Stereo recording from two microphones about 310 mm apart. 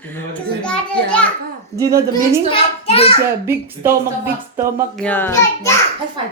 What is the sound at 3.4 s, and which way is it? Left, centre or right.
A woman's voice, centre.